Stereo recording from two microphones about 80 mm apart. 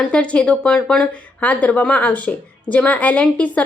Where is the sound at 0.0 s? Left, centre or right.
Centre.